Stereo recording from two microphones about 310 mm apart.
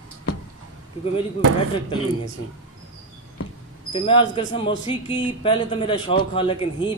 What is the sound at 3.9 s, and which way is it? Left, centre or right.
Speech, centre.